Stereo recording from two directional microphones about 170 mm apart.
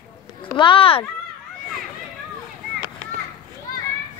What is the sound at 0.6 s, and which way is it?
Speech, 30° left (ahead or behind).